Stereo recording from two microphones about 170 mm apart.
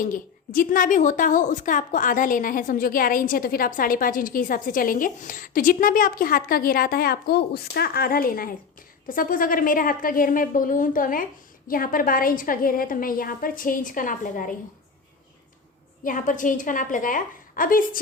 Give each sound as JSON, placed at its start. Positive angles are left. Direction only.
{"t": 0.0, "sound": "a woman's voice", "side_deg": 55}
{"t": 16.0, "sound": "a woman's voice", "side_deg": 50}